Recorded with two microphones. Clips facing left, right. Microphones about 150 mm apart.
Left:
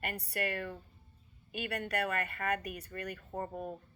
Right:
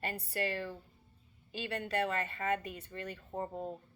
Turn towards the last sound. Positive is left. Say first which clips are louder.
# even
turn(degrees=-25)  # may be behind; listen again after turning